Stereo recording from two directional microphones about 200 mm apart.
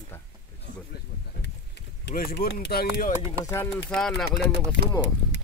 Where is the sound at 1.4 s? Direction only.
55° left (ahead or behind).